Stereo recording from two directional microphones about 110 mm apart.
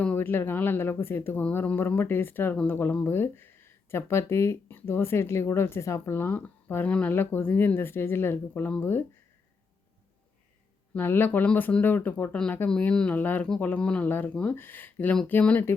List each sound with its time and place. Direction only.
0.0 s speech: 15° left (ahead or behind)
10.9 s speech: 20° left (ahead or behind)